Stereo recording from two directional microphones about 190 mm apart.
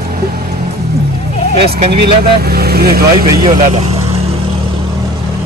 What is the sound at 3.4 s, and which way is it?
Speech, 35° right (ahead or behind).